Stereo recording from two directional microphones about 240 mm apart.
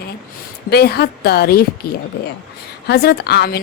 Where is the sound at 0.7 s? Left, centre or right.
Left.